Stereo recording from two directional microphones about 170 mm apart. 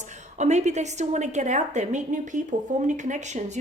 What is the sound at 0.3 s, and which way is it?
A woman's voice, 45° right (ahead or behind).